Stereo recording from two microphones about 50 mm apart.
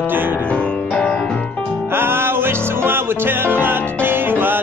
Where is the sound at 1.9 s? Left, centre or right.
Right.